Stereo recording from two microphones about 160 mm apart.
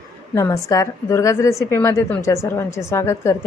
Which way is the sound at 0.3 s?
20° left (ahead or behind).